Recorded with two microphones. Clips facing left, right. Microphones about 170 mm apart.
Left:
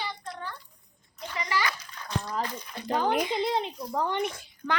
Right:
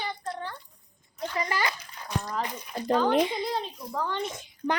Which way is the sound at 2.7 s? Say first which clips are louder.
Right 5 dB; 40° right (ahead or behind).